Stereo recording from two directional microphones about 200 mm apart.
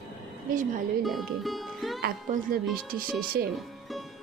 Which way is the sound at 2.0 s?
50° right (ahead or behind).